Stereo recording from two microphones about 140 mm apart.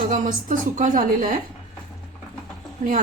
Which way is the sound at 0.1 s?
70° right (ahead or behind).